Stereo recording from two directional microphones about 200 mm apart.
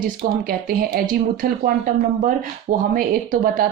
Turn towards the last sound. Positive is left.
turn(degrees=-45)  # may be behind; listen again after turning